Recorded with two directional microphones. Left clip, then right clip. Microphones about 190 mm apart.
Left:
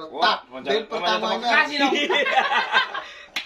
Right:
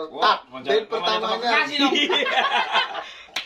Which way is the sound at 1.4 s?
Centre (ahead or behind).